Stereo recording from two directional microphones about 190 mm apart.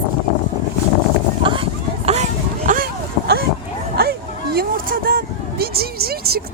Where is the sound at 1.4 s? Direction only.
25° right (ahead or behind).